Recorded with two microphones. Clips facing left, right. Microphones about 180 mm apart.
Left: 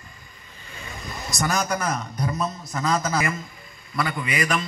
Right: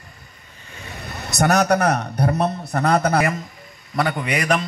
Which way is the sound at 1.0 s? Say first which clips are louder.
Right 7 dB; 65° right (ahead or behind).